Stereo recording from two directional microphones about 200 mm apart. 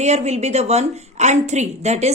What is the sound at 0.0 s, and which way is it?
Speech, 35° right (ahead or behind).